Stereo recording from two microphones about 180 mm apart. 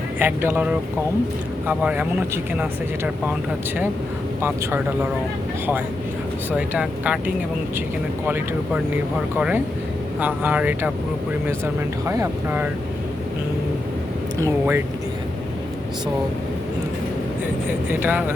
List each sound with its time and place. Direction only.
0.2 s speech: 10° right (ahead or behind)
6.6 s speech: 5° right (ahead or behind)
10.2 s speech: 10° right (ahead or behind)
14.3 s speech: 15° right (ahead or behind)
17.7 s speech: 10° right (ahead or behind)